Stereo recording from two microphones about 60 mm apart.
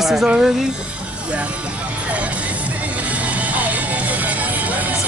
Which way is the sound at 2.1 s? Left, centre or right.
Right.